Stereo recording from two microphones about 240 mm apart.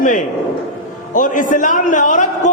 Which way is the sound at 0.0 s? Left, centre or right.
Left.